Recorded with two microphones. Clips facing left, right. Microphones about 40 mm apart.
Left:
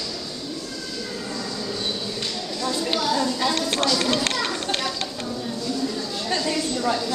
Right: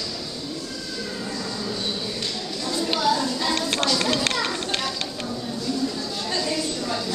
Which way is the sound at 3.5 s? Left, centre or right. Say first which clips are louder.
Left 1 dB; centre.